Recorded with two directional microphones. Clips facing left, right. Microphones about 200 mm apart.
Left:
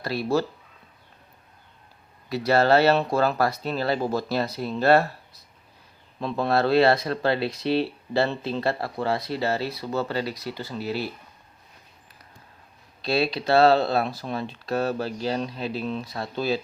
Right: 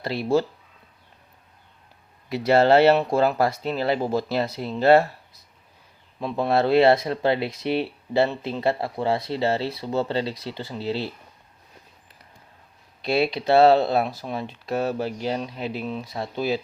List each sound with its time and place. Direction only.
0.0 s speech: 25° right (ahead or behind)
2.3 s speech: 20° right (ahead or behind)
6.1 s speech: 10° right (ahead or behind)
13.0 s speech: 20° right (ahead or behind)